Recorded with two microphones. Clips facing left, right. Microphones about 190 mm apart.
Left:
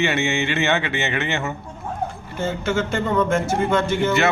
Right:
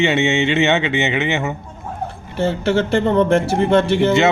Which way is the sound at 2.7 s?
30° right (ahead or behind).